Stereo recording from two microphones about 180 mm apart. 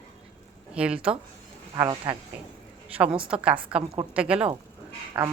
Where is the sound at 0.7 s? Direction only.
5° right (ahead or behind).